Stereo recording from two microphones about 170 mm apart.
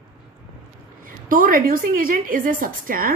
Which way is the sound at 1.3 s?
55° right (ahead or behind).